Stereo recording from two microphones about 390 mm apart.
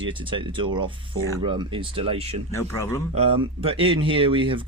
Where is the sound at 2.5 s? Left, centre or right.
Centre.